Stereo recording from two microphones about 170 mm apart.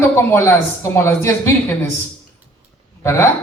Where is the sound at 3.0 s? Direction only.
15° left (ahead or behind).